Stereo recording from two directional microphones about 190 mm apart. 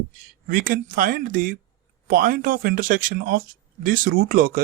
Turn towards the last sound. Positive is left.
turn(degrees=-45)  # may be behind; listen again after turning